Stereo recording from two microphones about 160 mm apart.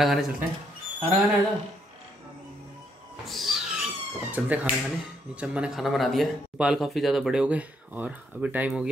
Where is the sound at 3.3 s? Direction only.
Centre (ahead or behind).